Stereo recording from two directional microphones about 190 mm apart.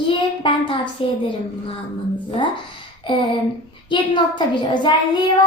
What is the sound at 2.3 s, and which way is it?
A woman's voice, 25° left (ahead or behind).